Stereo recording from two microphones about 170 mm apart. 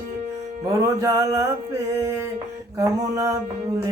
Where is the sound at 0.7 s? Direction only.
20° right (ahead or behind).